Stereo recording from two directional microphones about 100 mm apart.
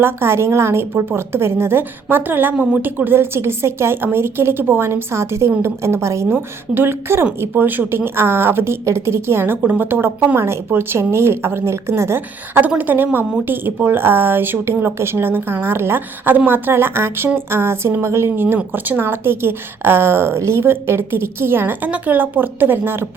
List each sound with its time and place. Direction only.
0.0 s a woman's voice: 25° right (ahead or behind)